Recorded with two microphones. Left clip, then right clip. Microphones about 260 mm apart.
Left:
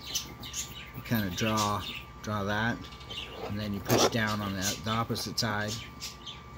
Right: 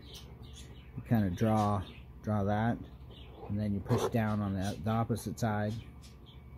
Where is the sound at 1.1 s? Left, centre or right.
Right.